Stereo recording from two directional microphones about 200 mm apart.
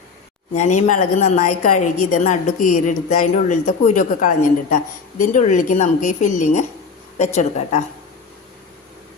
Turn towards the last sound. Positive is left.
turn(degrees=35)  # may be behind; listen again after turning